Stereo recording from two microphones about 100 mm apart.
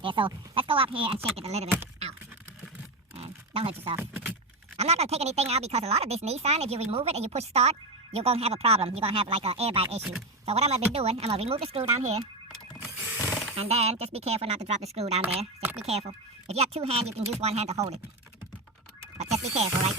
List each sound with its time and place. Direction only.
0.0 s speech: 55° right (ahead or behind); by 1.7 s 90° right
3.2 s a sound: 75° right (ahead or behind)
4.0 s speech: 20° right (ahead or behind)
4.8 s speech: 90° right
10.0 s speech: 5° right (ahead or behind)
10.4 s speech: 90° right
13.0 s a sound: 15° right (ahead or behind)
13.6 s speech: 90° right
19.2 s speech: 90° right